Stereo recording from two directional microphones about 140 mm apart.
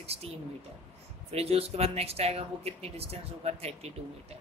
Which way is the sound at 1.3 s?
45° right (ahead or behind).